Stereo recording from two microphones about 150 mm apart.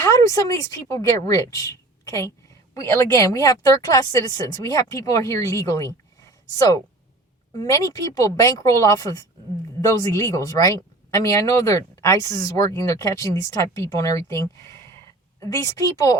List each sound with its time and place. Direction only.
0.0 s a woman's voice: 20° left (ahead or behind)